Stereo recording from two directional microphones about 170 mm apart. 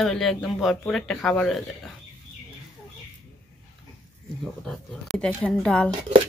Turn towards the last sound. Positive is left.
turn(degrees=5)  # may be behind; listen again after turning